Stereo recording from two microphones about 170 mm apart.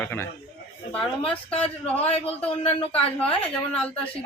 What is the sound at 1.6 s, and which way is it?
Speech, 10° left (ahead or behind).